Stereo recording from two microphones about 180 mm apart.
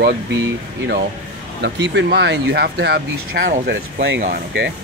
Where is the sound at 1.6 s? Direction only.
75° right (ahead or behind).